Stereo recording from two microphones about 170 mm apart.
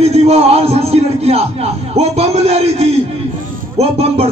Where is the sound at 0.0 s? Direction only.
40° right (ahead or behind).